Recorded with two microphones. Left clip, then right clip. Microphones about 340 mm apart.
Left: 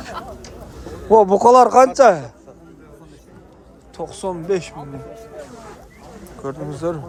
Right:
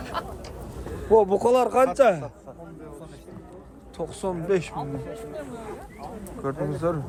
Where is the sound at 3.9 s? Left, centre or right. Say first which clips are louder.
Left 4 dB; centre.